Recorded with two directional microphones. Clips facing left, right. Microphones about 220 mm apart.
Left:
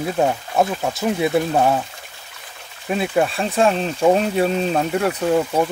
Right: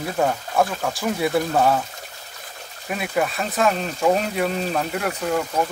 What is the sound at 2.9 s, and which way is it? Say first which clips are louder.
Speech: left 4 dB; 30° left (ahead or behind).